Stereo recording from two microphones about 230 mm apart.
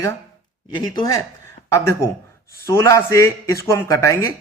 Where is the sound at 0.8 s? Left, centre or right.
Centre.